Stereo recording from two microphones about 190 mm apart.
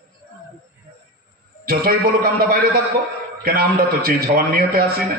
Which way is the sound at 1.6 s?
50° right (ahead or behind).